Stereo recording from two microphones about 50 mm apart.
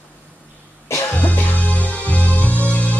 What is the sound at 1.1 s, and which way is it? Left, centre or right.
Music, left.